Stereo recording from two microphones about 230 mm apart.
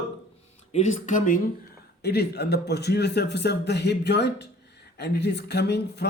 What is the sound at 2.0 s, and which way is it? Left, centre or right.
A man's voice, left.